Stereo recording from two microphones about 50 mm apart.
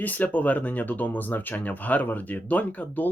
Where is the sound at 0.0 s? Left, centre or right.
Left.